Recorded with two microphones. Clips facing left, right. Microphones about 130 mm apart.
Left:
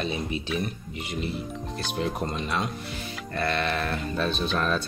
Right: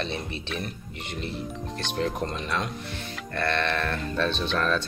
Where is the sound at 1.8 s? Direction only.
5° left (ahead or behind).